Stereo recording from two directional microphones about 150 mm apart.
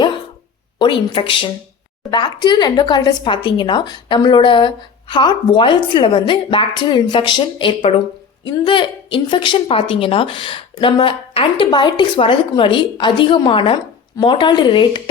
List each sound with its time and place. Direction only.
0.8 s speech: 35° left (ahead or behind)